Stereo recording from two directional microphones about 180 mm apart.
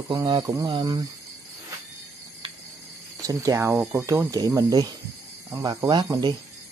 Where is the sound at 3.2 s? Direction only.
15° right (ahead or behind).